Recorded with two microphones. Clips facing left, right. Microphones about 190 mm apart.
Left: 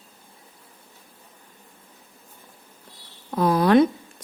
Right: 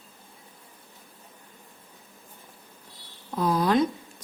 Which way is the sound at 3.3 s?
65° left (ahead or behind).